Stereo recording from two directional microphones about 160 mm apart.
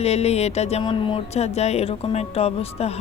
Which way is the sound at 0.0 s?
40° left (ahead or behind).